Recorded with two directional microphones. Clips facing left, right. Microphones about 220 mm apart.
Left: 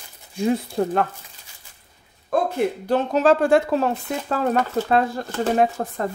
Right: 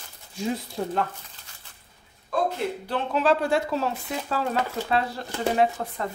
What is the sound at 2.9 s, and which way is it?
Speech, 45° left (ahead or behind).